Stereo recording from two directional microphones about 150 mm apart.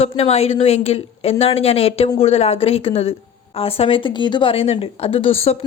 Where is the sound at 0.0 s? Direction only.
45° left (ahead or behind).